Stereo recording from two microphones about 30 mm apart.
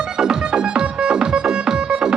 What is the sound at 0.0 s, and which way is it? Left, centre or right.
Music, right.